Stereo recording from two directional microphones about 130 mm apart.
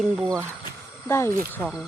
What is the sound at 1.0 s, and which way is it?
Speech, 20° left (ahead or behind).